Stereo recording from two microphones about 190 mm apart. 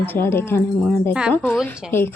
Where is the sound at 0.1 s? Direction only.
10° left (ahead or behind).